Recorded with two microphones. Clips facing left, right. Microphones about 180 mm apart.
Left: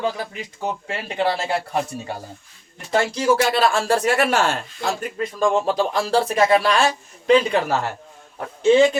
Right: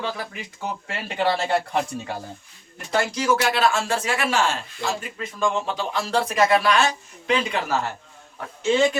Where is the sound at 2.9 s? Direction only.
30° left (ahead or behind).